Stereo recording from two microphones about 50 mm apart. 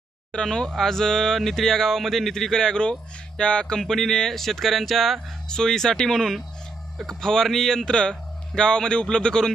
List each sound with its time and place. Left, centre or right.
0.3 s speech: centre